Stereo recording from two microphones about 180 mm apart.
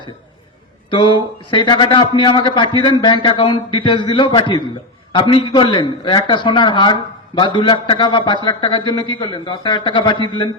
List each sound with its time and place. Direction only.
0.9 s a man's voice: 25° left (ahead or behind)